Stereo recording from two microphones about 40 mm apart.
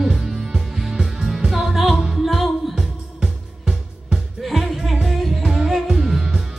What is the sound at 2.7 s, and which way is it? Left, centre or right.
Music, centre.